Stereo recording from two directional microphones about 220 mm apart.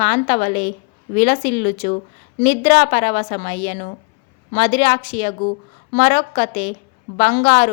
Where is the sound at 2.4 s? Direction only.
35° left (ahead or behind).